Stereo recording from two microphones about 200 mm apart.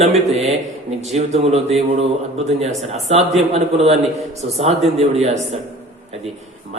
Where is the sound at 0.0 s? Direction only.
30° right (ahead or behind).